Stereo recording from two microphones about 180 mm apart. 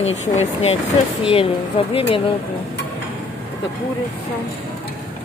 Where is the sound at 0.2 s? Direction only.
35° left (ahead or behind).